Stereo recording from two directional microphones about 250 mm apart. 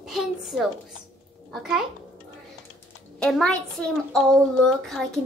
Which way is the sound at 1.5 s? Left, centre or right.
Centre.